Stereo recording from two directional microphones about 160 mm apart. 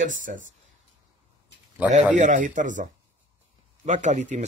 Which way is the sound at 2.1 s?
50° right (ahead or behind).